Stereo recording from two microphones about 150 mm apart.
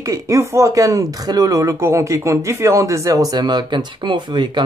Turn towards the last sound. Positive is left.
turn(degrees=-30)  # may be behind; listen again after turning